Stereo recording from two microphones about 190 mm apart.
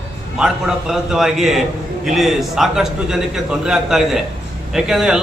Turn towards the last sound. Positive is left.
turn(degrees=-5)  # may be behind; listen again after turning